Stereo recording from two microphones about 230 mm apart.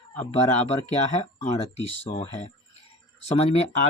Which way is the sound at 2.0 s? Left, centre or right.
Left.